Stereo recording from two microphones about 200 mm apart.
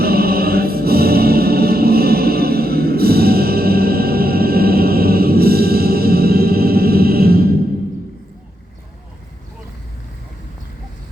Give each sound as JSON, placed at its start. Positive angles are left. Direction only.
{"t": 0.0, "sound": "music", "side_deg": -50}